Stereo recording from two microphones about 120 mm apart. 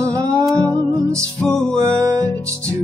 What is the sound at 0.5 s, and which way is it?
Music, 5° left (ahead or behind).